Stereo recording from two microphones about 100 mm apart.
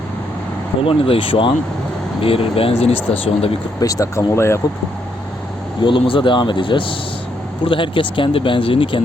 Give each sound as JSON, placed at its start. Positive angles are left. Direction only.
{"t": 0.8, "sound": "speech", "side_deg": 70}
{"t": 3.8, "sound": "speech", "side_deg": 35}
{"t": 5.8, "sound": "speech", "side_deg": 55}